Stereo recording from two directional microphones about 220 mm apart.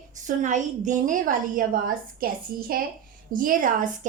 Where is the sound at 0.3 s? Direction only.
35° right (ahead or behind).